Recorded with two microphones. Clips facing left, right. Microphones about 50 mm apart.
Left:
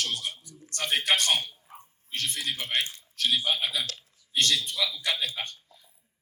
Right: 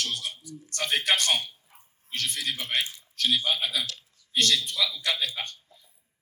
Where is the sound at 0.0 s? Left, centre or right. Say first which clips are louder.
Even; left.